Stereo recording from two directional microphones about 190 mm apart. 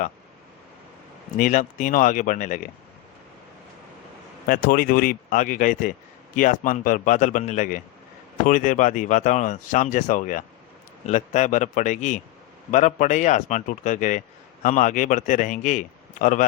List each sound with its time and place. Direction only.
1.4 s speech: 40° left (ahead or behind)
4.4 s speech: 50° left (ahead or behind)